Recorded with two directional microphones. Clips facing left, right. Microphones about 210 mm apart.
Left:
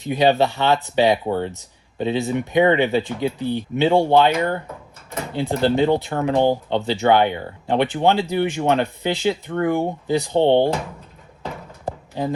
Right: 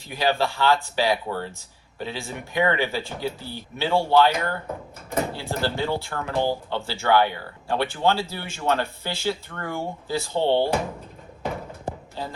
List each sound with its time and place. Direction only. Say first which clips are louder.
0.0 s speech: left 7 dB; 20° left (ahead or behind)
12.2 s speech: left 11 dB; 15° left (ahead or behind)